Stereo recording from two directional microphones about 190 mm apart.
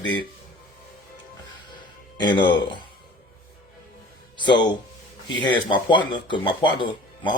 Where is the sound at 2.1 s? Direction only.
25° left (ahead or behind).